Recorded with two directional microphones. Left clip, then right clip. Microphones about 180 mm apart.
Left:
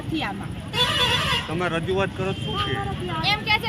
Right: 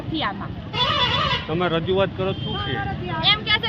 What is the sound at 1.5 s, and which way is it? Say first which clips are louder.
Speech: right 3 dB; 50° right (ahead or behind).